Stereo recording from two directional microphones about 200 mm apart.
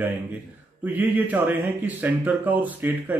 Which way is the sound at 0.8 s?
10° right (ahead or behind).